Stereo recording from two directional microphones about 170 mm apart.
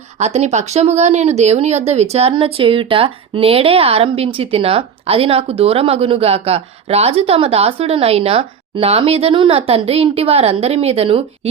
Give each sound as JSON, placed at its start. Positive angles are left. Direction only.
{"t": 0.2, "sound": "speech", "side_deg": -40}